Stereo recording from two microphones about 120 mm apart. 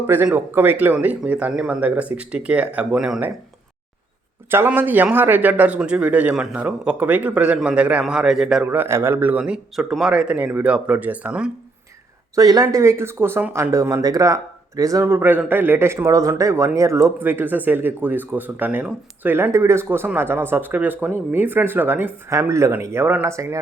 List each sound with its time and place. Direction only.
0.3 s speech: 15° right (ahead or behind)
4.5 s speech: 15° right (ahead or behind)
8.6 s speech: 15° right (ahead or behind)
12.4 s speech: 30° right (ahead or behind)
15.0 s speech: 15° right (ahead or behind)